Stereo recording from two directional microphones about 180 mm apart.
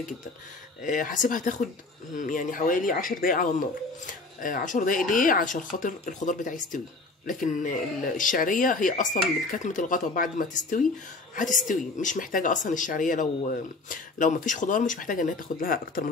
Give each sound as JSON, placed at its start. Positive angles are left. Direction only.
{"t": 0.8, "sound": "a woman's voice", "side_deg": 45}